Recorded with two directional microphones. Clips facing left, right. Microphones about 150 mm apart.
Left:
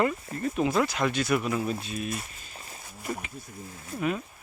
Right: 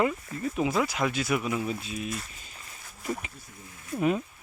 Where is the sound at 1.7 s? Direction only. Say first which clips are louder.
Left 1 dB; 65° left (ahead or behind).